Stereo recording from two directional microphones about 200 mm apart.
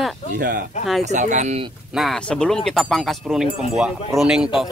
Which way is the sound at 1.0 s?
35° right (ahead or behind).